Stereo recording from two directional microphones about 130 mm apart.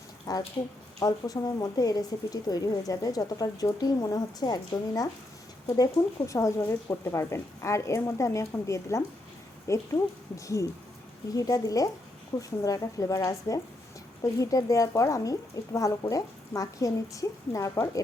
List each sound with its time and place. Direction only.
0.3 s speech: 30° left (ahead or behind)